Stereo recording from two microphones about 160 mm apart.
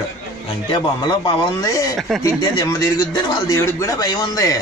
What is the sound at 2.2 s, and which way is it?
A man's voice, 25° left (ahead or behind).